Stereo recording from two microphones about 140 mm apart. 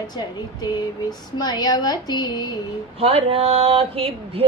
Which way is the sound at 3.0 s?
45° right (ahead or behind).